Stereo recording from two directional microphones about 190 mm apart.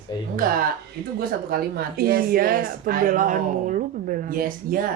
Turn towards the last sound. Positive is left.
turn(degrees=-50)  # may be behind; listen again after turning